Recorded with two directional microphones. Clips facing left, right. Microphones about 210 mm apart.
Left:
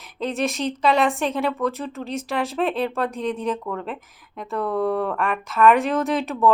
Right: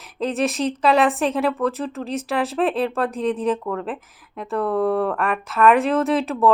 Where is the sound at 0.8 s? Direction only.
35° right (ahead or behind).